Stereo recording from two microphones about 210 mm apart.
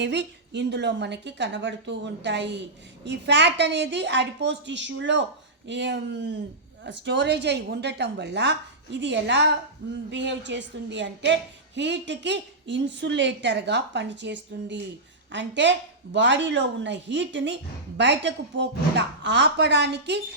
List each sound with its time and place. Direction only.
0.0 s a woman's voice: 55° right (ahead or behind)